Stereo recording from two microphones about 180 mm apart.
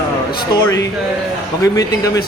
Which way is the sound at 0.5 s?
20° left (ahead or behind).